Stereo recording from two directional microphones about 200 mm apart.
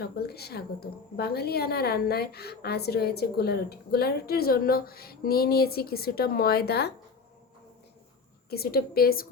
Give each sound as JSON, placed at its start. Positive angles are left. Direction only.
{"t": 0.0, "sound": "a woman's voice", "side_deg": 50}
{"t": 8.4, "sound": "a woman's voice", "side_deg": 50}